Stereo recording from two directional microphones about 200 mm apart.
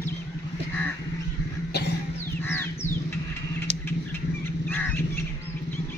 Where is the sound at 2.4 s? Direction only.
10° left (ahead or behind).